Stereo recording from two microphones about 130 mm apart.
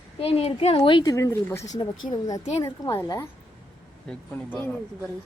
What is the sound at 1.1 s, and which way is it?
A woman's voice, 20° left (ahead or behind).